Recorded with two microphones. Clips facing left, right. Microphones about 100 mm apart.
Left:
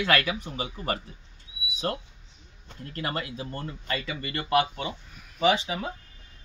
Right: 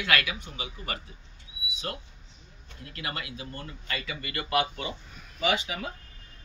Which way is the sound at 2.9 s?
35° left (ahead or behind).